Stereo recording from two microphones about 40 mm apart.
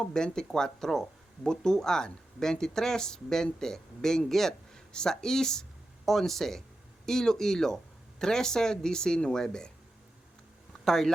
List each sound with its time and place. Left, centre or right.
0.0 s speech: centre
10.8 s speech: centre